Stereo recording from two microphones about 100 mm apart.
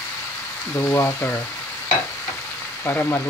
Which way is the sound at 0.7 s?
25° left (ahead or behind).